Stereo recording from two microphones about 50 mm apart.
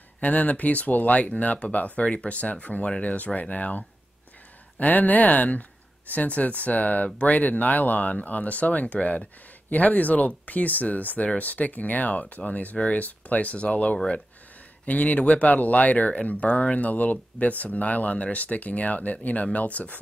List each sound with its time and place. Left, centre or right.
0.2 s speech: left